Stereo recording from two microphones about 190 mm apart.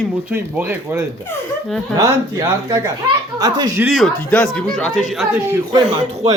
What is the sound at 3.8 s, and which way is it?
Speech, 5° right (ahead or behind).